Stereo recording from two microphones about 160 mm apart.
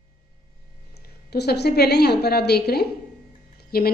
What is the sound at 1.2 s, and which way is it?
A woman's voice, 90° left.